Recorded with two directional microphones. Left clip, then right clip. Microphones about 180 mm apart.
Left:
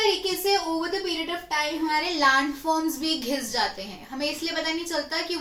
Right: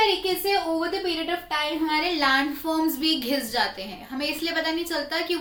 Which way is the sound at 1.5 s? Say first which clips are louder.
Left 1 dB; 15° right (ahead or behind).